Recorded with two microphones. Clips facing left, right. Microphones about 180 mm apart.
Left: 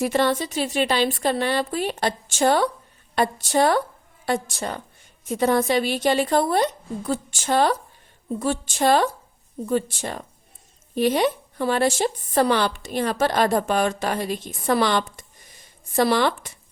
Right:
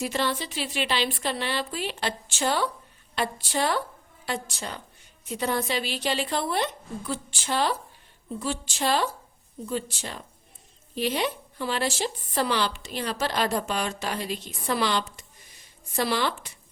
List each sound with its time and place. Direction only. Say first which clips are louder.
0.0 s a woman's voice: left 7 dB; 55° left (ahead or behind)